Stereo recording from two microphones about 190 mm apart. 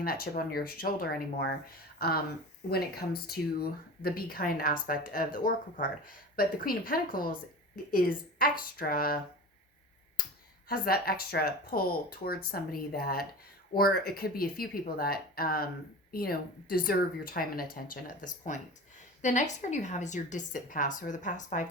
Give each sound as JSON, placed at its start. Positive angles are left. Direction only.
{"t": 0.0, "sound": "speech", "side_deg": 50}
{"t": 10.7, "sound": "a woman's voice", "side_deg": 50}